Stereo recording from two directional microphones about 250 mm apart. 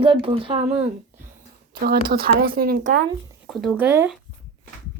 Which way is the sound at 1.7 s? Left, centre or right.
Right.